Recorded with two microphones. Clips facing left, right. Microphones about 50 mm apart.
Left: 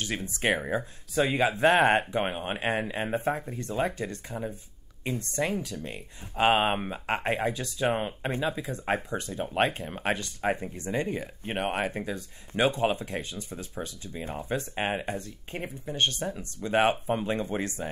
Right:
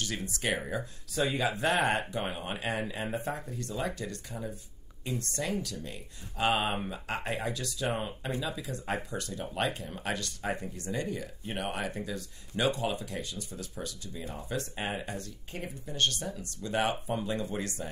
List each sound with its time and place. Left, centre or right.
0.0 s speech: left
10.1 s speech: left
15.0 s speech: left